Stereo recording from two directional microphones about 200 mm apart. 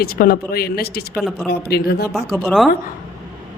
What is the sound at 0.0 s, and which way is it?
Speech, 50° left (ahead or behind).